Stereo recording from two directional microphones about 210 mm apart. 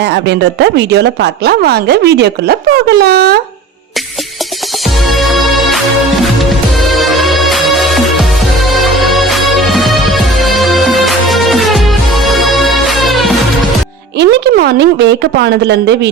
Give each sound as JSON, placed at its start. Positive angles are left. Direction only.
{"t": 0.0, "sound": "a woman's voice", "side_deg": -55}
{"t": 5.0, "sound": "music", "side_deg": 0}
{"t": 14.2, "sound": "a woman's voice", "side_deg": -55}